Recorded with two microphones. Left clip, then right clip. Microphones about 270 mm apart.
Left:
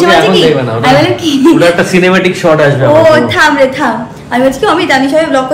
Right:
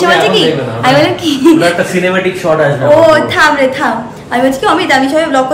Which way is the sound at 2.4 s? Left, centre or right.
Left.